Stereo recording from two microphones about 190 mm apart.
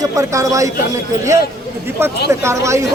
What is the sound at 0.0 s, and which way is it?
Speech, 15° right (ahead or behind).